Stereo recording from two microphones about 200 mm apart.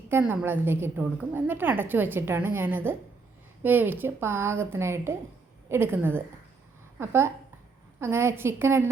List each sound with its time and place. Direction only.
0.1 s a woman's voice: 10° right (ahead or behind)